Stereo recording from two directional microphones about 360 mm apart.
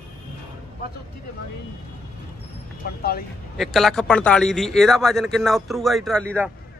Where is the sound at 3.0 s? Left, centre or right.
Left.